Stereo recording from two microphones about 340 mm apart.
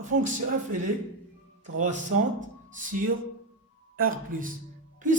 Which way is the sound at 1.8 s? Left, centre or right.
Right.